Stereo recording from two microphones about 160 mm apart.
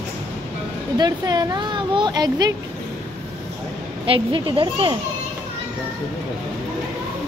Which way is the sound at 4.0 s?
35° right (ahead or behind).